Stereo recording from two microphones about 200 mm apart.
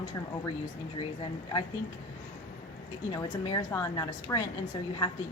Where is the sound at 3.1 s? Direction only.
20° left (ahead or behind).